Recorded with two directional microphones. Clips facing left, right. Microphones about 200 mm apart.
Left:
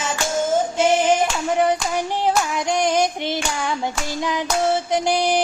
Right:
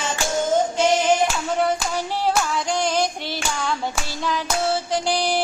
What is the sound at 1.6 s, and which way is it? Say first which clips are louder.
Clapping: left 2 dB; 20° left (ahead or behind).